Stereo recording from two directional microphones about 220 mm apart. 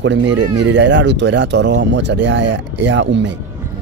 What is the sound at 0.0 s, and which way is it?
Speech, 55° right (ahead or behind).